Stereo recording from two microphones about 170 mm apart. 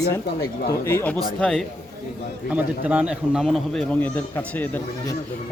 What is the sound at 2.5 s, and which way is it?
A man's voice, 10° right (ahead or behind).